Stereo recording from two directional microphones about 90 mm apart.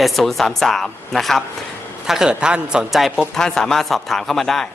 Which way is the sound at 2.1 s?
5° right (ahead or behind).